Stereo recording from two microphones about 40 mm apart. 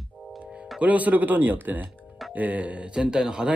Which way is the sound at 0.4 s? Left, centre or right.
Right.